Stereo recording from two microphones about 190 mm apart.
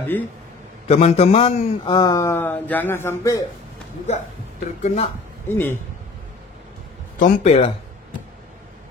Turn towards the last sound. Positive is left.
turn(degrees=35)  # may be behind; listen again after turning